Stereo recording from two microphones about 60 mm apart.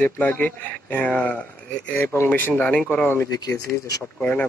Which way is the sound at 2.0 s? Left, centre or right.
Left.